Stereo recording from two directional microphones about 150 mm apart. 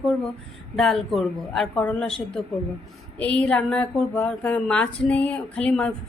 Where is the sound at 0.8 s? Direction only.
Centre (ahead or behind).